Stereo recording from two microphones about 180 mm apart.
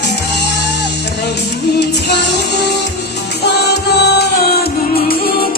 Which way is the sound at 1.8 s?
65° left (ahead or behind).